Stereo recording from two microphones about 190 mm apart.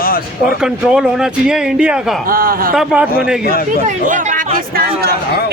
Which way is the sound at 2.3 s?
50° right (ahead or behind).